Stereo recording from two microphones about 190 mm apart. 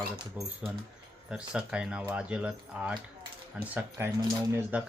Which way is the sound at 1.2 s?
5° right (ahead or behind).